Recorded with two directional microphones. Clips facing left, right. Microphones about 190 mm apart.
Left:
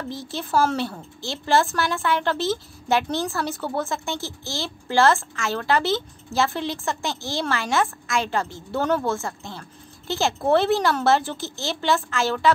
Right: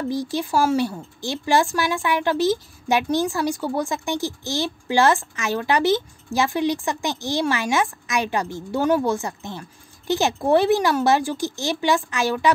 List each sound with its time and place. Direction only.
0.1 s speech: 15° right (ahead or behind)